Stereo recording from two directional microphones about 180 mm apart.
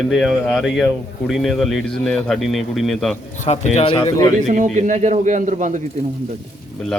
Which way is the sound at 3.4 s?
35° left (ahead or behind).